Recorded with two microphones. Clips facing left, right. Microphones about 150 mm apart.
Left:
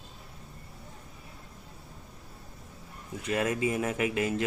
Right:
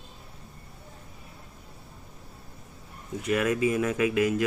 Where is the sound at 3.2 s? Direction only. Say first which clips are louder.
Right 4 dB; 30° left (ahead or behind).